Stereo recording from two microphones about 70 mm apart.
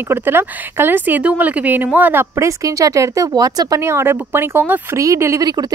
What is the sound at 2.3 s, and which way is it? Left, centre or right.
Speech, right.